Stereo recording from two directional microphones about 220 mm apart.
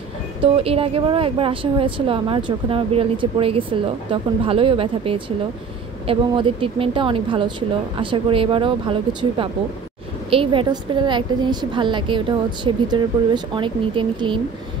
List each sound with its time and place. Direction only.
0.4 s a woman's voice: 25° right (ahead or behind)